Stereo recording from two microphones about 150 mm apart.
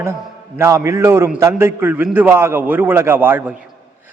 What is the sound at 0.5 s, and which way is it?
A man's voice, 15° right (ahead or behind).